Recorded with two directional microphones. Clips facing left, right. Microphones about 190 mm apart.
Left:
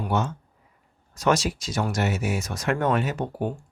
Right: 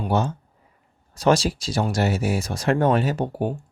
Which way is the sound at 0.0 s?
35° right (ahead or behind).